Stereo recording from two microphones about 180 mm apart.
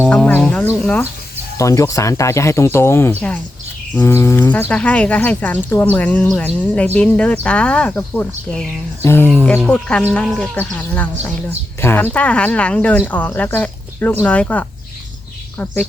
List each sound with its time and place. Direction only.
0.1 s speech: 5° left (ahead or behind)